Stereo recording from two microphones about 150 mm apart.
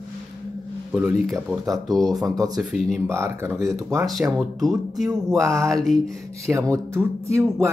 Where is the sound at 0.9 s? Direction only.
5° right (ahead or behind).